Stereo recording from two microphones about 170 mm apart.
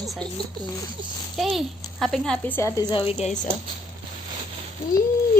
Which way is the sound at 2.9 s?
30° left (ahead or behind).